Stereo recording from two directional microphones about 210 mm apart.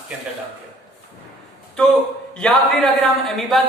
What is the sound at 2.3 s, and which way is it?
A man's voice, 5° left (ahead or behind).